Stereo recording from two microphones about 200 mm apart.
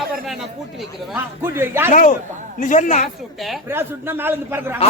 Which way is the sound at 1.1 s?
10° right (ahead or behind).